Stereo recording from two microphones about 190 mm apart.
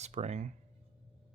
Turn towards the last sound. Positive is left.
turn(degrees=-35)  # may be behind; listen again after turning